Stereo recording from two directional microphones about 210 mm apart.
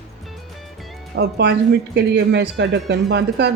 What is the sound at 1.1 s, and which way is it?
Speech, 55° right (ahead or behind).